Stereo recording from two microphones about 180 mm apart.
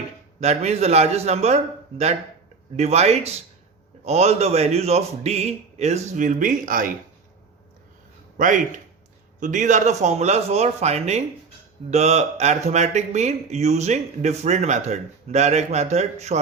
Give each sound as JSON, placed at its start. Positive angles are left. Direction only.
{"t": 0.3, "sound": "speech", "side_deg": -40}
{"t": 2.7, "sound": "speech", "side_deg": -35}
{"t": 8.4, "sound": "speech", "side_deg": -45}